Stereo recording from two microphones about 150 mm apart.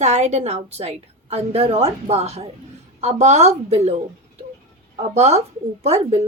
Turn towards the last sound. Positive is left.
turn(degrees=-45)  # may be behind; listen again after turning